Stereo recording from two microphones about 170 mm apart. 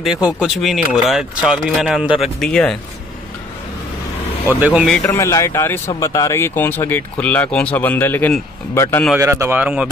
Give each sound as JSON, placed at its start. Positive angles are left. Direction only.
{"t": 0.0, "sound": "speech", "side_deg": -5}
{"t": 4.5, "sound": "speech", "side_deg": -10}
{"t": 5.0, "sound": "speech", "side_deg": 15}
{"t": 9.2, "sound": "speech", "side_deg": -15}